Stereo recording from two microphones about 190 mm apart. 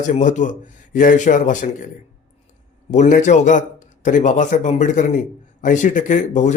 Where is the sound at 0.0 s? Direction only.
40° left (ahead or behind).